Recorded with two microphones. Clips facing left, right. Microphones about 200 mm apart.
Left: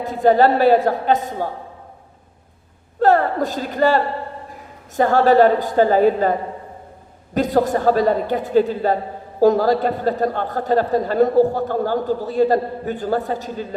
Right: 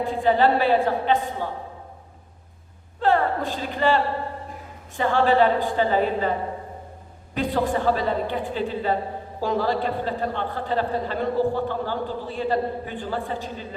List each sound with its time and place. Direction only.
0.0 s a woman's voice: 40° left (ahead or behind)
3.0 s a man's voice: 40° left (ahead or behind)
7.3 s a man's voice: 40° left (ahead or behind)